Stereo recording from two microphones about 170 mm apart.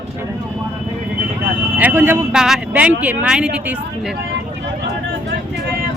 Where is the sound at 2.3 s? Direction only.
5° right (ahead or behind).